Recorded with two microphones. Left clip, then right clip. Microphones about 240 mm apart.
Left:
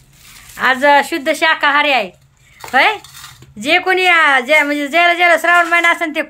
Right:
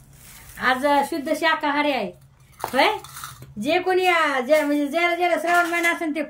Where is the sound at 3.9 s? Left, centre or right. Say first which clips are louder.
Left 9 dB; centre.